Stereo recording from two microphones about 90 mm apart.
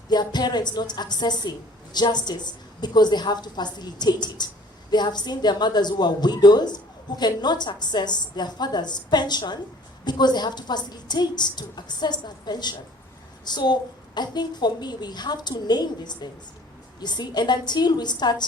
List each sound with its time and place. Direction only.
0.1 s a woman's voice: 50° left (ahead or behind)